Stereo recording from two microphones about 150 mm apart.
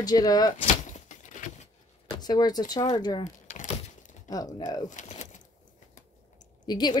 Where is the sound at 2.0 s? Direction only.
25° left (ahead or behind).